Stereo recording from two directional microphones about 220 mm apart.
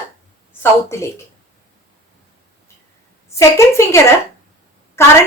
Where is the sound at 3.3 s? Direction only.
10° left (ahead or behind).